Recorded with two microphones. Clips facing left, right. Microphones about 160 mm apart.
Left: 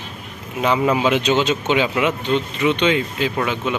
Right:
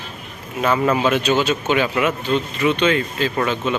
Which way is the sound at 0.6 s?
15° left (ahead or behind).